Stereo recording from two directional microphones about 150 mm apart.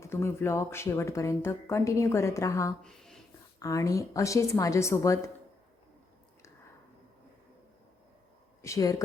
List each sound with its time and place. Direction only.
0.0 s speech: 15° left (ahead or behind)
2.8 s a sound: 5° left (ahead or behind)
3.6 s speech: 20° left (ahead or behind)
8.6 s speech: 20° left (ahead or behind)